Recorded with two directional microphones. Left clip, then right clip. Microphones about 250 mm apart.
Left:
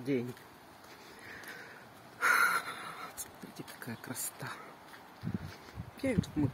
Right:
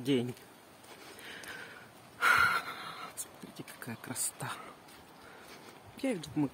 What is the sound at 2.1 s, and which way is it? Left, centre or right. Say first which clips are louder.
Gasp: right 1 dB; centre.